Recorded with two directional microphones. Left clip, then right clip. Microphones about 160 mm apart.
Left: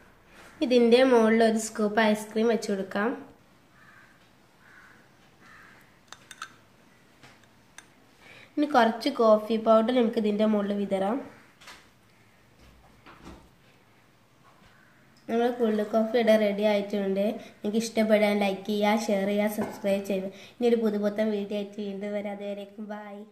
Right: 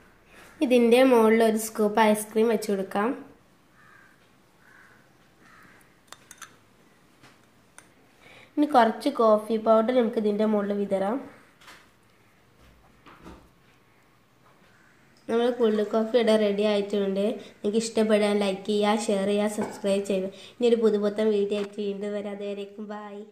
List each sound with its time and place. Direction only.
0.6 s a woman's voice: 35° right (ahead or behind)
8.3 s a woman's voice: 20° right (ahead or behind)
15.2 s a woman's voice: 25° right (ahead or behind)